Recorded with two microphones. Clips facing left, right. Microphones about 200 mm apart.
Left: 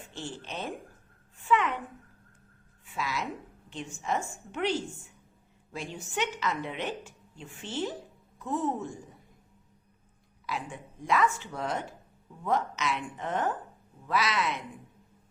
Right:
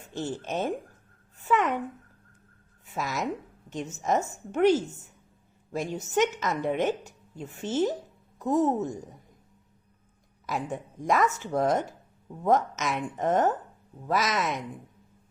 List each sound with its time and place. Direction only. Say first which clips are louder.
0.0 s a woman's voice: right 7 dB; 40° right (ahead or behind)
2.8 s a woman's voice: right 4 dB; 45° right (ahead or behind)
10.4 s a woman's voice: right 5 dB; 45° right (ahead or behind)